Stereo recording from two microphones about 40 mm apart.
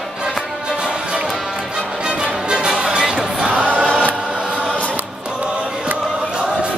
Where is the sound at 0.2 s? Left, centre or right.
Centre.